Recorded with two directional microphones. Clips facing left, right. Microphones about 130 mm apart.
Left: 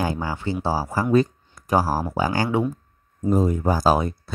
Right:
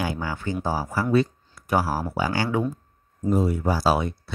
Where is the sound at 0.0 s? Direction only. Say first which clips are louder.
Left 3 dB; 35° left (ahead or behind).